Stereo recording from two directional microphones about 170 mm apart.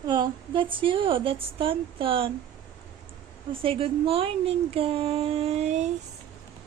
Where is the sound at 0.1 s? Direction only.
30° right (ahead or behind).